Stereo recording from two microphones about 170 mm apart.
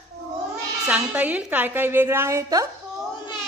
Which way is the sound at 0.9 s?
10° right (ahead or behind).